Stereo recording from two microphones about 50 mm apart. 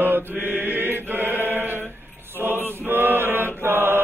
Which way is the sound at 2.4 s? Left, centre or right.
Right.